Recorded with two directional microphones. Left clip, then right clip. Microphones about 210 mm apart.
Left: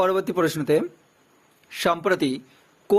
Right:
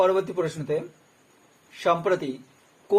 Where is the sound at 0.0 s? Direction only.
55° left (ahead or behind).